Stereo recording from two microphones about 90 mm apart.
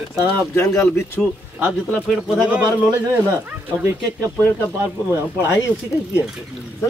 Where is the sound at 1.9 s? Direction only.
Centre (ahead or behind).